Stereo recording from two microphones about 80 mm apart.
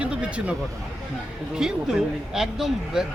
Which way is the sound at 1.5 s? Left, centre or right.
Centre.